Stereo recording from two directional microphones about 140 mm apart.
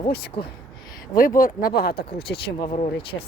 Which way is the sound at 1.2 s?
80° left.